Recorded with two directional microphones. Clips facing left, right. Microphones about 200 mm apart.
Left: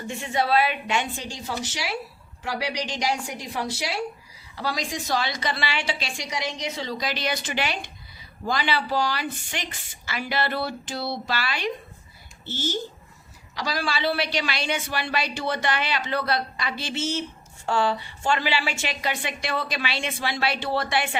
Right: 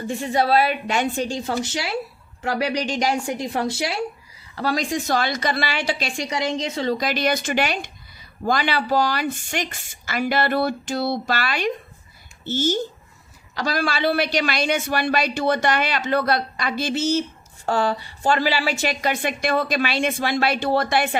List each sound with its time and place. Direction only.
0.1 s a woman's voice: 35° right (ahead or behind)
6.7 s a woman's voice: 50° right (ahead or behind)